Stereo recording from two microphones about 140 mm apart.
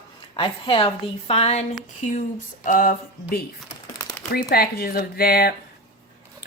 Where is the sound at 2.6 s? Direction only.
85° left.